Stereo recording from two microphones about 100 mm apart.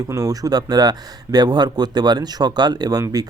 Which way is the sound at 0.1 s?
35° right (ahead or behind).